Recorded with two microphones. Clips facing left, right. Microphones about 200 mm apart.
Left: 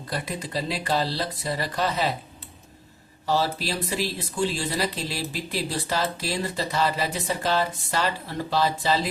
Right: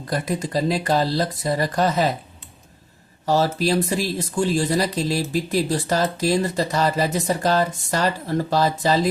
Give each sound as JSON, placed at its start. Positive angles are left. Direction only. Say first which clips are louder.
{"t": 0.1, "sound": "speech", "louder": "right 7 dB", "side_deg": -45}
{"t": 3.2, "sound": "speech", "louder": "right 6 dB", "side_deg": -45}